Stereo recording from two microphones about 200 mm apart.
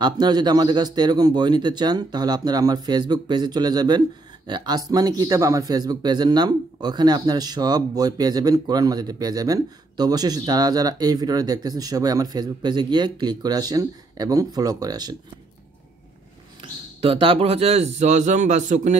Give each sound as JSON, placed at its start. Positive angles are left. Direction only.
{"t": 0.0, "sound": "speech", "side_deg": -20}
{"t": 17.0, "sound": "a man's voice", "side_deg": -25}